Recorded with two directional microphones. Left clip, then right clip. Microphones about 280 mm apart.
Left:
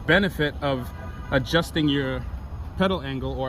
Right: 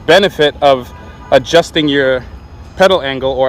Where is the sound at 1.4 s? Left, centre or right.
Centre.